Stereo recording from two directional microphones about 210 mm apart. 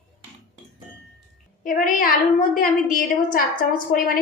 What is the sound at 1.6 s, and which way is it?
A woman's voice, 40° left (ahead or behind).